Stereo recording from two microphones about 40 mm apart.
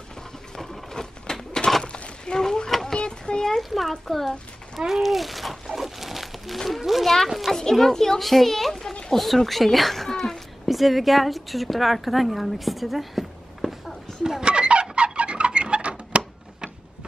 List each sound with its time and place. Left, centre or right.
0.6 s a sound: centre
3.5 s a child's voice: centre
4.7 s dog: centre
6.8 s a child's voice: centre
14.2 s chicken: centre
15.1 s clock: right